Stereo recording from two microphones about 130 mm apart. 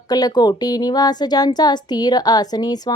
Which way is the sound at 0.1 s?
30° left (ahead or behind).